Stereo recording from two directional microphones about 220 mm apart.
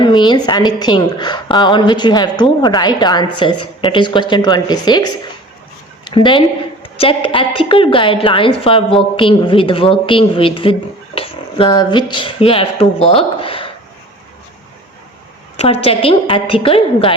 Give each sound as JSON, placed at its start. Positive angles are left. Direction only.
{"t": 0.0, "sound": "a woman's voice", "side_deg": 20}
{"t": 6.1, "sound": "a woman's voice", "side_deg": 20}
{"t": 15.5, "sound": "a woman's voice", "side_deg": 25}